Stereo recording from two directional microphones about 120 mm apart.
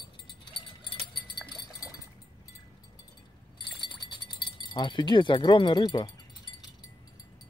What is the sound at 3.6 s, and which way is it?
Keys jangling, 40° left (ahead or behind).